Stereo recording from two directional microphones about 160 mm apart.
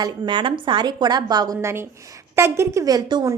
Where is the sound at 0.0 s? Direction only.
30° right (ahead or behind).